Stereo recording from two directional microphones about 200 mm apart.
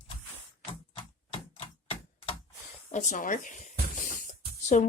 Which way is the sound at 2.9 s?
35° left (ahead or behind).